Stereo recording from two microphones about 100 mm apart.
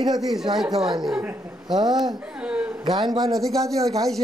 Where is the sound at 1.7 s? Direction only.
45° right (ahead or behind).